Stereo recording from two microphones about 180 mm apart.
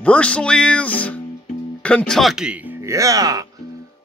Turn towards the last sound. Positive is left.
turn(degrees=-20)  # may be behind; listen again after turning